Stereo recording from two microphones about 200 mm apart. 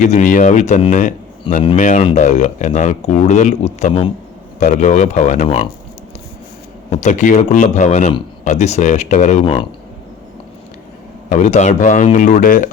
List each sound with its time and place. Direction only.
0.0 s speech: 40° left (ahead or behind)
6.9 s speech: 35° left (ahead or behind)
11.3 s speech: 35° left (ahead or behind)